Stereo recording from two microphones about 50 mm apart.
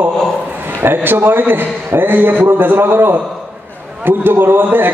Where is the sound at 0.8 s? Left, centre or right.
Right.